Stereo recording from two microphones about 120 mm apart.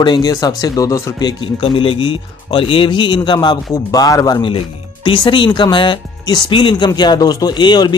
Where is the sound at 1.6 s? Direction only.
45° left (ahead or behind); by 4.4 s 30° left (ahead or behind).